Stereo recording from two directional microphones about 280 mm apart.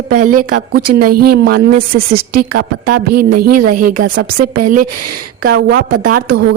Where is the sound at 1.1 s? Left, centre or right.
Right.